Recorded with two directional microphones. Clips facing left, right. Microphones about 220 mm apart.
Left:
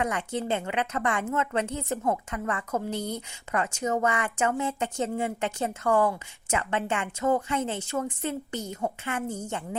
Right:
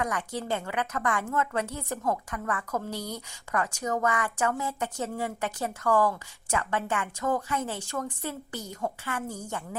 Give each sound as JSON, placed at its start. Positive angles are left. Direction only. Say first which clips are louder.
{"t": 0.0, "sound": "a woman's voice", "louder": "left 3 dB", "side_deg": 25}